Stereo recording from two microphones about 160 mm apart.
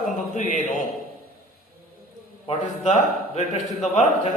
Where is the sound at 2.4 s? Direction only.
45° left (ahead or behind).